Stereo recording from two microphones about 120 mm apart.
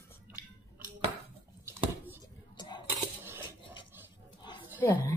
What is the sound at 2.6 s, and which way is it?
Coin, 35° left (ahead or behind).